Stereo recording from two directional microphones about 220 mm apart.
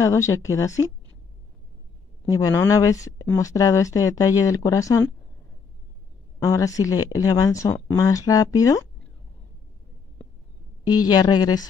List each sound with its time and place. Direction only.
0.0 s speech: 15° left (ahead or behind)
2.2 s speech: 15° left (ahead or behind)
6.4 s speech: 15° left (ahead or behind)
10.9 s speech: 20° left (ahead or behind)